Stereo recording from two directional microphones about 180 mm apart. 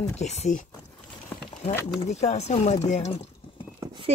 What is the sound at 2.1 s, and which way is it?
Speech, 40° left (ahead or behind).